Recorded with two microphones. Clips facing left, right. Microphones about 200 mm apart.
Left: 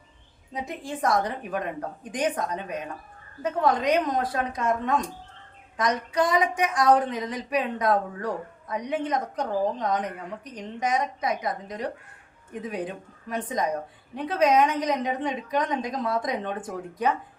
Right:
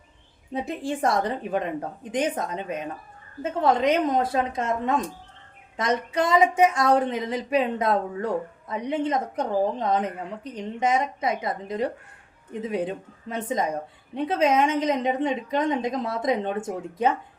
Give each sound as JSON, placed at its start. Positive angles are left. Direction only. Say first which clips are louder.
{"t": 0.5, "sound": "speech", "louder": "right 5 dB", "side_deg": -30}